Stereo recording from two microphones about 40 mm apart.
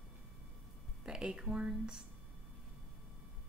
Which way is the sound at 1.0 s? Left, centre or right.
Centre.